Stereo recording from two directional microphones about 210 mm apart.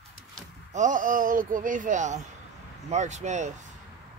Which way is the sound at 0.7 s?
35° right (ahead or behind).